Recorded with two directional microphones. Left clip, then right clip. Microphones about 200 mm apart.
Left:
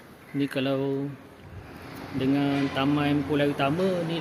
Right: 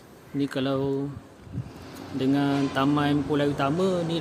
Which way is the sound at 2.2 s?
15° right (ahead or behind).